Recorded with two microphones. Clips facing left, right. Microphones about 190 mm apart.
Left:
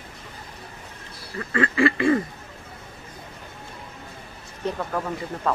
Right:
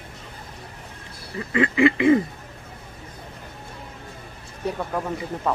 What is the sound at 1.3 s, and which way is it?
Quack, 20° right (ahead or behind).